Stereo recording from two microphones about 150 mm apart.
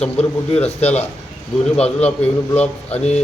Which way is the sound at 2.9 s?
45° left (ahead or behind).